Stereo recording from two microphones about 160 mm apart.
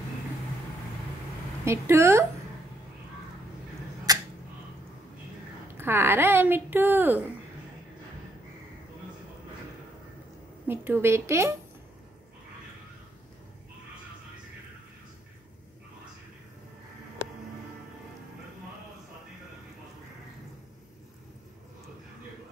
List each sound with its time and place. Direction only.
1.6 s a woman's voice: 15° right (ahead or behind)
4.1 s a sound: 25° right (ahead or behind)
5.8 s a woman's voice: 15° right (ahead or behind)
10.7 s a woman's voice: 10° right (ahead or behind)